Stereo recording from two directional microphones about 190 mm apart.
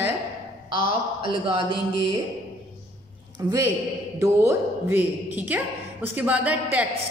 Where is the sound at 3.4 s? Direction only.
20° right (ahead or behind).